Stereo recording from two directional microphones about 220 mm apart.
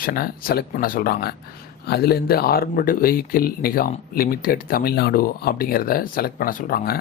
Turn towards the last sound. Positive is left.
turn(degrees=40)  # may be behind; listen again after turning